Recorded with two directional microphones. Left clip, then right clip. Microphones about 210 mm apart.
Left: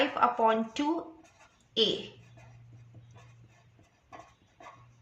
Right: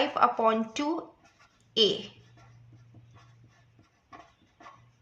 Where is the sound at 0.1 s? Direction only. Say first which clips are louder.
Right 1 dB; 40° right (ahead or behind).